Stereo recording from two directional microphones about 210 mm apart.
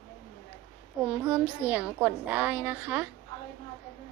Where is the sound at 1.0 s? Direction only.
5° right (ahead or behind).